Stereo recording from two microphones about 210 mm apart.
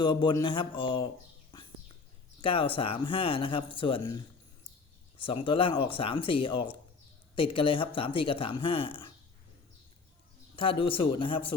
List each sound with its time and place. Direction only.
0.0 s speech: 20° left (ahead or behind)
2.4 s speech: 25° left (ahead or behind)
10.5 s speech: 25° left (ahead or behind)